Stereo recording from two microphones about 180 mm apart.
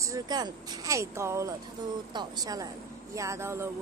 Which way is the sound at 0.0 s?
20° right (ahead or behind).